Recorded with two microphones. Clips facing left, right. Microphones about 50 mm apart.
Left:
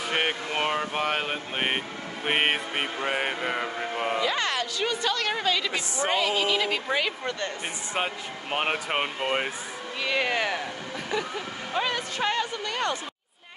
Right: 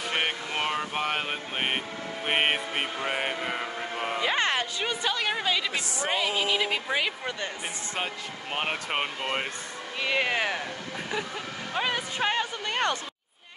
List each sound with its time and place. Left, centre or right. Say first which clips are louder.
0.0 s speech: left 2 dB; centre
2.2 s music: left 1 dB; centre
4.2 s a sound: even; right
4.8 s a woman's voice: left 4 dB; centre
7.9 s speech: left 5 dB; centre
10.0 s a woman's voice: even; centre
11.7 s a woman's voice: left 1 dB; centre
12.6 s a sound: right 1 dB; right